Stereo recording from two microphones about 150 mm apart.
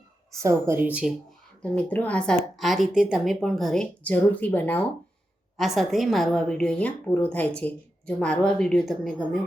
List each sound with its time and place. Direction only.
0.3 s speech: 20° right (ahead or behind)
1.6 s a woman's voice: 10° left (ahead or behind)
5.5 s a woman's voice: centre (ahead or behind)